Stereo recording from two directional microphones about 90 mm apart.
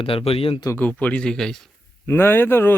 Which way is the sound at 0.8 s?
15° left (ahead or behind).